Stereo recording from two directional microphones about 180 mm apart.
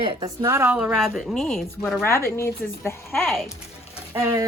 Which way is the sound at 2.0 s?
15° left (ahead or behind).